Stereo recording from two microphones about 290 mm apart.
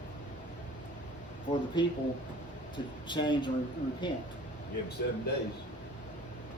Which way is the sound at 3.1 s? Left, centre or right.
Centre.